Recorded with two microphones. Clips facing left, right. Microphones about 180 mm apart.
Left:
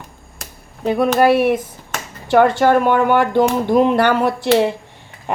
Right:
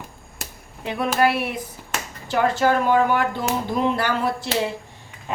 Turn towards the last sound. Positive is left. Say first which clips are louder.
# left 8 dB
turn(degrees=65)  # may be behind; listen again after turning